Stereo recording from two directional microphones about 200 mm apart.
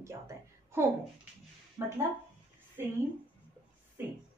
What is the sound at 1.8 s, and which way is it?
Speech, 15° right (ahead or behind).